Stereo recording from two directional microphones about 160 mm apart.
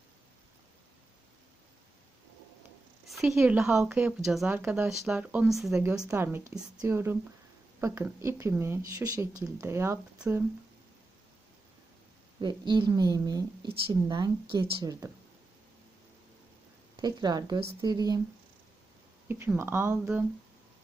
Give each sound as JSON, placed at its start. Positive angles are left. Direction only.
{"t": 3.1, "sound": "a woman's voice", "side_deg": 0}
{"t": 6.0, "sound": "a woman's voice", "side_deg": -15}
{"t": 12.4, "sound": "speech", "side_deg": -30}
{"t": 17.0, "sound": "speech", "side_deg": -25}
{"t": 19.3, "sound": "speech", "side_deg": -15}